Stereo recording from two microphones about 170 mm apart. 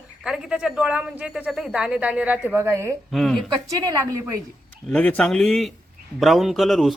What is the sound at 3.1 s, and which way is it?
Speech, centre (ahead or behind).